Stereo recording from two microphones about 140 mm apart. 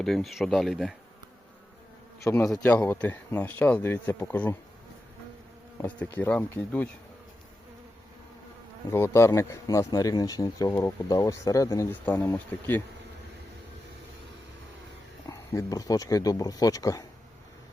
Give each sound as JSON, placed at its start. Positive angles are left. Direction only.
{"t": 0.0, "sound": "speech", "side_deg": 0}
{"t": 2.5, "sound": "speech", "side_deg": 10}
{"t": 5.7, "sound": "speech", "side_deg": 15}
{"t": 8.9, "sound": "speech", "side_deg": 20}
{"t": 15.3, "sound": "speech", "side_deg": 25}